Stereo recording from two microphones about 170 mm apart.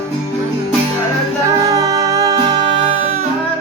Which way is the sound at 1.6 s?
20° right (ahead or behind).